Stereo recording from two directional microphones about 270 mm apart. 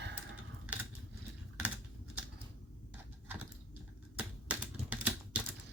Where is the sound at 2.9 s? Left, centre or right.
Centre.